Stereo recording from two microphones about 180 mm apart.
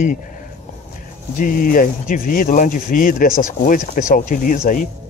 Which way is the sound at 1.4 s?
50° left (ahead or behind).